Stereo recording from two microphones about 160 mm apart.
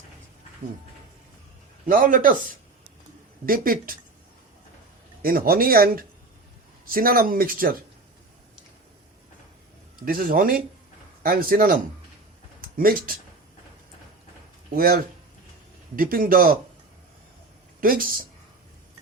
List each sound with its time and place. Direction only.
1.9 s speech: 55° right (ahead or behind)
3.4 s speech: 60° right (ahead or behind)
5.2 s speech: 65° right (ahead or behind)
10.1 s speech: 65° right (ahead or behind)
14.8 s speech: 65° right (ahead or behind)
17.7 s speech: 60° right (ahead or behind)